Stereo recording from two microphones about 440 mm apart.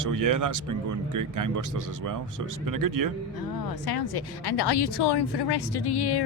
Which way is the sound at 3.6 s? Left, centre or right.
Left.